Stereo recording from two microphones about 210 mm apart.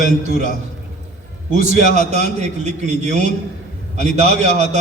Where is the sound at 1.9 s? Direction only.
30° right (ahead or behind).